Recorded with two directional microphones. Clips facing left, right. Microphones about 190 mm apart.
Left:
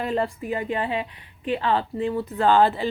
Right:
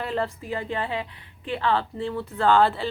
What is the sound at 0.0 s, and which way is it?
A woman's voice, 15° left (ahead or behind).